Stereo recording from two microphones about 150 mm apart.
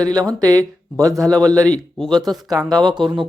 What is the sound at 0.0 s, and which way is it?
Speech, 25° right (ahead or behind).